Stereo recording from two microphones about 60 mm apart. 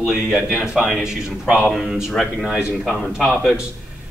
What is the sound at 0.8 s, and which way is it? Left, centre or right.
Speech, centre.